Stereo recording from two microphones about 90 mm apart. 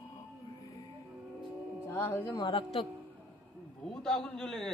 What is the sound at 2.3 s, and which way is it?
Speech, 70° left (ahead or behind).